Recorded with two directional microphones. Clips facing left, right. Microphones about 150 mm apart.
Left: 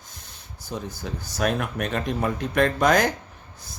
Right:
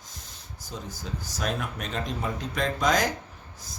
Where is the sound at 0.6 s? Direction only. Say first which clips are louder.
Left 6 dB; 60° left (ahead or behind).